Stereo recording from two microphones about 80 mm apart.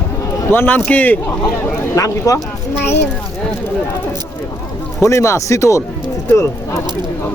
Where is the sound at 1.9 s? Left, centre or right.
Left.